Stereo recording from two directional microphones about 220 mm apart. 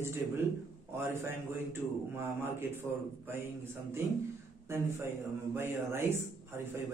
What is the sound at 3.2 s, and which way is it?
Speech, 10° right (ahead or behind).